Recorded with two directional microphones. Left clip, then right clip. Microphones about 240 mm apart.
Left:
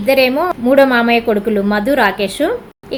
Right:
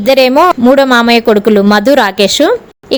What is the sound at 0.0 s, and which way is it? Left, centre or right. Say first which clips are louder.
Speech: right 6 dB; right.